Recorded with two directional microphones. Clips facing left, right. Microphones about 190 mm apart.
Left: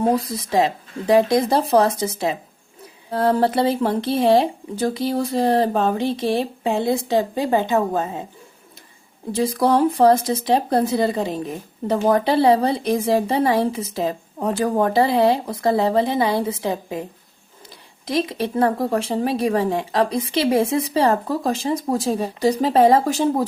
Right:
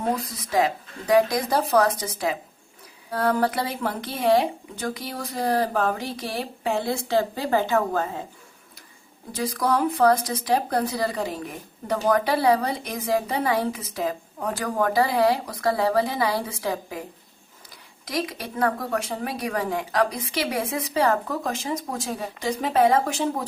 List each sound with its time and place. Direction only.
0.0 s speech: 30° left (ahead or behind)
9.3 s speech: 30° left (ahead or behind)
18.0 s speech: 25° left (ahead or behind)